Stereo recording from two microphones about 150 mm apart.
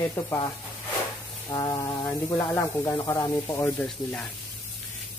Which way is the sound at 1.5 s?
25° left (ahead or behind).